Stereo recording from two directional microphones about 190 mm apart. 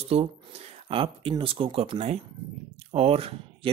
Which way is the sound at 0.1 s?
30° right (ahead or behind).